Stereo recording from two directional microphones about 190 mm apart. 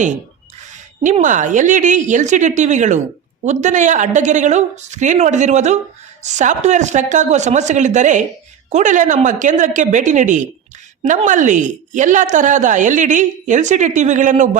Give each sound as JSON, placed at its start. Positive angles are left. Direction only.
{"t": 0.7, "sound": "a woman's voice", "side_deg": -40}